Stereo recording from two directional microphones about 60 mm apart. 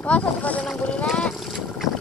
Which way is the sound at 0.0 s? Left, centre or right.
Left.